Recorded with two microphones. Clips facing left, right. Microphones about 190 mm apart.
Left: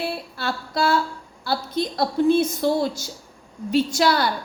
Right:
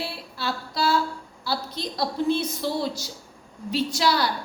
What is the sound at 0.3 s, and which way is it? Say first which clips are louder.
A woman's voice: left 1 dB; 55° left (ahead or behind).